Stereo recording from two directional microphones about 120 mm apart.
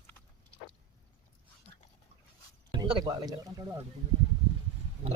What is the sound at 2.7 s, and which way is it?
Music, 45° right (ahead or behind).